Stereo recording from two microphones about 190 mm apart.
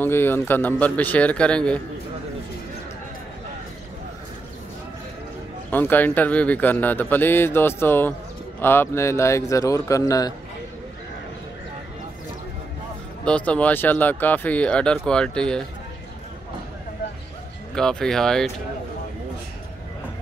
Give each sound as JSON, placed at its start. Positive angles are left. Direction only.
{"t": 0.0, "sound": "speech", "side_deg": 10}
{"t": 5.7, "sound": "speech", "side_deg": 10}
{"t": 13.2, "sound": "speech", "side_deg": 5}
{"t": 17.7, "sound": "speech", "side_deg": 5}